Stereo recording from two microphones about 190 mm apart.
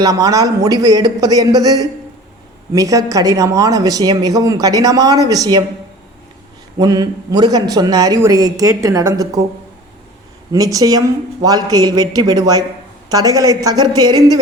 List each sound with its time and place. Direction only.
0.0 s speech: 20° right (ahead or behind)
6.7 s speech: 20° right (ahead or behind)
10.5 s speech: 20° right (ahead or behind)